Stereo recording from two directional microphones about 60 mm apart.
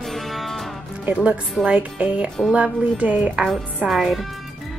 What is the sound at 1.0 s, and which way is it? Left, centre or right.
Music, right.